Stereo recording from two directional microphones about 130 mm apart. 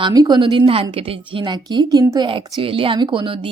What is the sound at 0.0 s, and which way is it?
A woman's voice, 30° right (ahead or behind).